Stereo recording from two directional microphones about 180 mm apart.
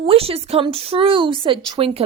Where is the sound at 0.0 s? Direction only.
30° right (ahead or behind).